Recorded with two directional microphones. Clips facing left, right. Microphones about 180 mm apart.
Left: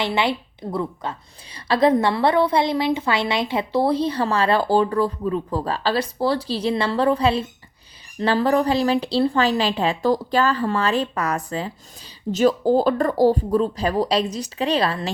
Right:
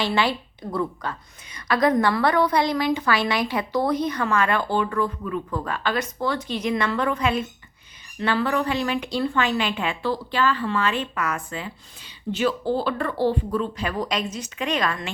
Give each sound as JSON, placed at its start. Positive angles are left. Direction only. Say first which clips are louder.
{"t": 0.0, "sound": "a woman's voice", "louder": "left 1 dB", "side_deg": 20}